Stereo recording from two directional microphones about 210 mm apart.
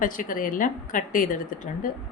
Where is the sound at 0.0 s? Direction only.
40° left (ahead or behind).